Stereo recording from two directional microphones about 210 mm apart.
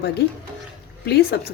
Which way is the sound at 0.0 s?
50° left (ahead or behind).